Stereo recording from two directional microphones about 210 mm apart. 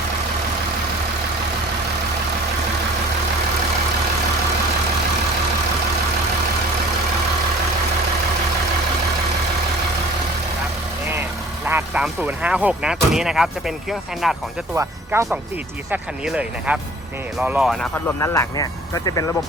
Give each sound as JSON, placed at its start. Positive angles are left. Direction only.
{"t": 11.1, "sound": "speech", "side_deg": -10}
{"t": 14.8, "sound": "speech", "side_deg": -15}
{"t": 18.2, "sound": "speech", "side_deg": 15}